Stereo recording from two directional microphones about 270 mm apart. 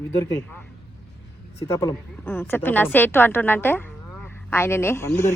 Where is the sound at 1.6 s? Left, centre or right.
Centre.